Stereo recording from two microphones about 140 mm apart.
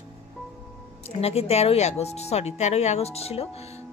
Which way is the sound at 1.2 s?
45° left (ahead or behind).